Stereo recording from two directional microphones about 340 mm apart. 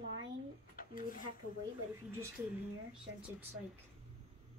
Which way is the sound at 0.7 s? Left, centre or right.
Left.